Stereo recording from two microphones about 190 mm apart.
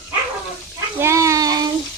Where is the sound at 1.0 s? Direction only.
15° right (ahead or behind).